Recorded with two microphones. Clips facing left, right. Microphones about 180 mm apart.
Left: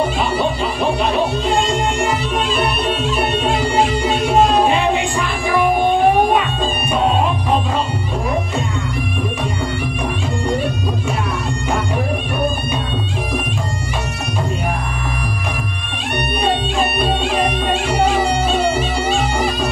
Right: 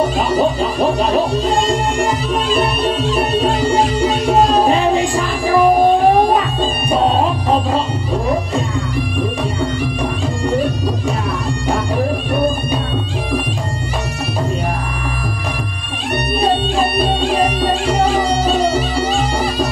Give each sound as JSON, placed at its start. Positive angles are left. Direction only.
{"t": 0.0, "sound": "music", "side_deg": -40}
{"t": 16.3, "sound": "music", "side_deg": -35}